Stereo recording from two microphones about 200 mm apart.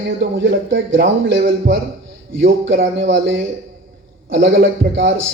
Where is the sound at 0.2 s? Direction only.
65° right (ahead or behind).